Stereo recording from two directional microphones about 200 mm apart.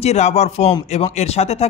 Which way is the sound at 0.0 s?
30° left (ahead or behind).